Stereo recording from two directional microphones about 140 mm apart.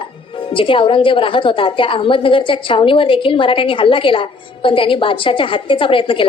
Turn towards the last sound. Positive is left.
turn(degrees=40)  # may be behind; listen again after turning